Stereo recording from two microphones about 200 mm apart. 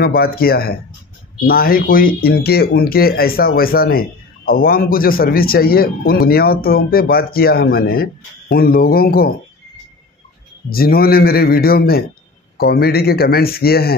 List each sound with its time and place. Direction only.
0.0 s speech: 50° left (ahead or behind)
10.7 s speech: 50° left (ahead or behind)